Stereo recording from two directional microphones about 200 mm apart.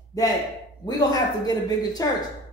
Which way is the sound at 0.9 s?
20° left (ahead or behind).